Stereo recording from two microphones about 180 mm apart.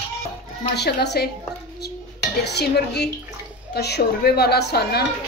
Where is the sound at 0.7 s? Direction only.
65° left (ahead or behind).